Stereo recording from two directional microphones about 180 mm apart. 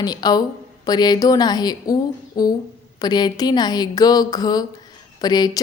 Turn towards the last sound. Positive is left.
turn(degrees=20)  # may be behind; listen again after turning